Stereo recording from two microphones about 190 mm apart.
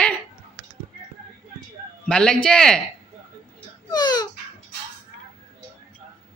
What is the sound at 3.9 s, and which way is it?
Speech, 20° left (ahead or behind).